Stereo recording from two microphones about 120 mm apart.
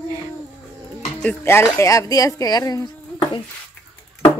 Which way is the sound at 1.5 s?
25° left (ahead or behind).